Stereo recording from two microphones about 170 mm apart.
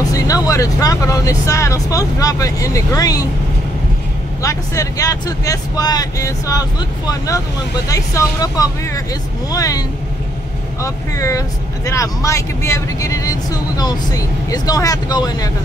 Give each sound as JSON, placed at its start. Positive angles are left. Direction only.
{"t": 0.0, "sound": "speech", "side_deg": 20}
{"t": 4.4, "sound": "speech", "side_deg": 20}